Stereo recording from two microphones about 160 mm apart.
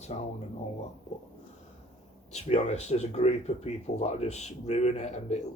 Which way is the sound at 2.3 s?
45° left (ahead or behind).